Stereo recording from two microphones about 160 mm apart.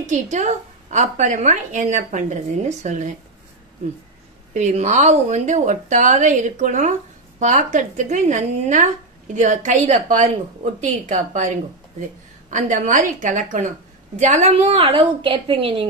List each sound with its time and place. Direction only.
0.0 s speech: 50° right (ahead or behind)
4.6 s a woman's voice: 45° right (ahead or behind)